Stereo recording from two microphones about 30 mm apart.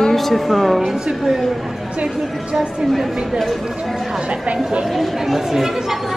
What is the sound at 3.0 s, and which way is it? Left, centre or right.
Speech, centre.